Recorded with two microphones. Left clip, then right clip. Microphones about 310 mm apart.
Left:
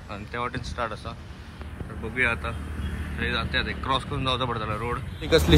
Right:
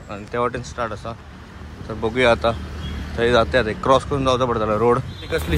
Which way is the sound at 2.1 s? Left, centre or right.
Centre.